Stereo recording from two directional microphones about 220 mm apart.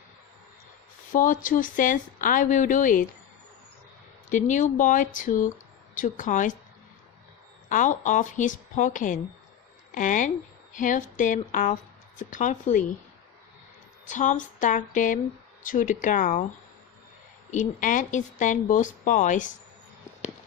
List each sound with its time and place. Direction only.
1.1 s a woman's voice: 35° left (ahead or behind)
4.3 s a woman's voice: 35° left (ahead or behind)
7.7 s a woman's voice: 35° left (ahead or behind)
14.0 s a woman's voice: 35° left (ahead or behind)
17.5 s a woman's voice: 35° left (ahead or behind)